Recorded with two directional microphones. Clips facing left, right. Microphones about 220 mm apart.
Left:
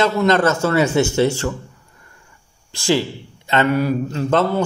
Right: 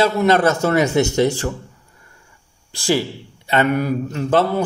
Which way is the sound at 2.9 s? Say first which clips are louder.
Left 1 dB; 10° right (ahead or behind).